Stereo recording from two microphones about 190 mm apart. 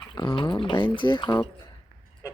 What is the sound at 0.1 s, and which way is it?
Speech, 25° left (ahead or behind).